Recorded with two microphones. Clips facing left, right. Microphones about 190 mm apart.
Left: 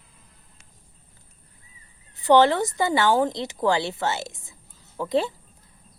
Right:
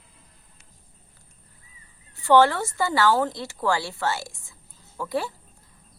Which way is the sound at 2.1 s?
20° left (ahead or behind).